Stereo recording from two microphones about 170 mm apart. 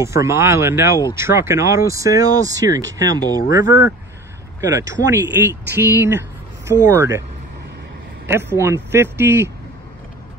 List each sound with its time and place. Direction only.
0.0 s speech: 15° right (ahead or behind)
8.3 s speech: 15° right (ahead or behind)